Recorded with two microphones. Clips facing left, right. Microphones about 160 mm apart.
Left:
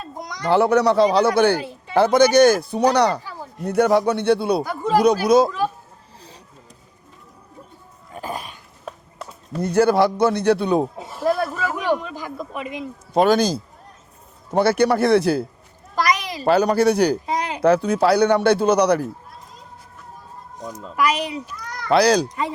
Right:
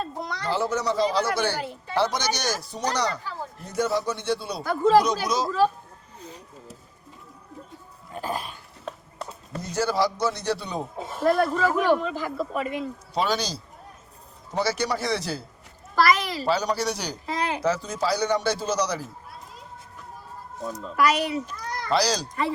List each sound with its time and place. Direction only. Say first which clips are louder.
0.0 s a sound: right 2 dB; 15° left (ahead or behind)
0.4 s speech: left 10 dB; 65° left (ahead or behind)
6.1 s a sound: right 4 dB; 35° left (ahead or behind)
8.1 s dog: even; 5° left (ahead or behind)
9.6 s speech: left 8 dB; 60° left (ahead or behind)
11.0 s speech: even; 10° left (ahead or behind)
13.1 s speech: left 10 dB; 50° left (ahead or behind)
16.0 s a sound: even; 15° left (ahead or behind)
16.5 s speech: left 10 dB; 55° left (ahead or behind)
17.2 s a sound: left 3 dB; 15° left (ahead or behind)
17.6 s speech: left 9 dB; 60° left (ahead or behind)
20.9 s speech: left 1 dB; 15° left (ahead or behind)
21.8 s speech: left 8 dB; 60° left (ahead or behind)